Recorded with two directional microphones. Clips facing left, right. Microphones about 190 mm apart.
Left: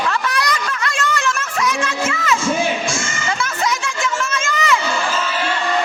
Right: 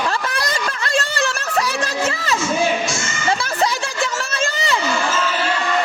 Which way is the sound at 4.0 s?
35° right (ahead or behind).